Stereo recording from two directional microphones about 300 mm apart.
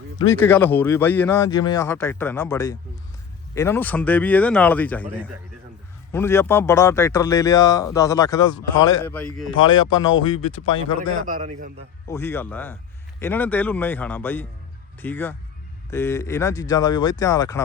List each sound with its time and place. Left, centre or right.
0.2 s a man's voice: centre
9.6 s a man's voice: centre